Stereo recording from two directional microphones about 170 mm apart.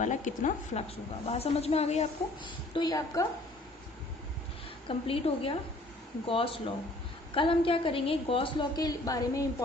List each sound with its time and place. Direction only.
0.0 s a woman's voice: 45° left (ahead or behind)
2.7 s a woman's voice: 25° left (ahead or behind)
4.9 s a woman's voice: 35° left (ahead or behind)